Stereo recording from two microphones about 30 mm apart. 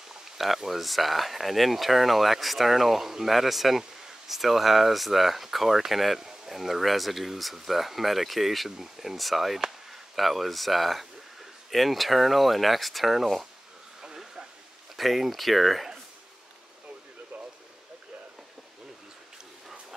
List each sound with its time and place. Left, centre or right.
0.6 s speech: centre
6.1 s speech: centre
14.0 s a sound: centre
15.0 s speech: centre